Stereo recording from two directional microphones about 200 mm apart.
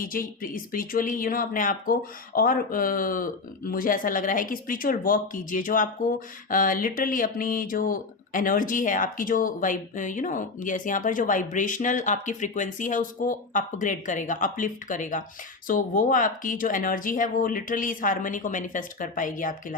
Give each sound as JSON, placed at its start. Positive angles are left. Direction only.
{"t": 0.0, "sound": "speech", "side_deg": 45}